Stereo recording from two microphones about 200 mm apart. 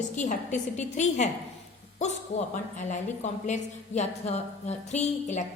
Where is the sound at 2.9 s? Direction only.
35° left (ahead or behind).